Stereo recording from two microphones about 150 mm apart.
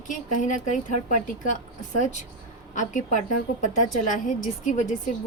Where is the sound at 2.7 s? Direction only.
55° left (ahead or behind).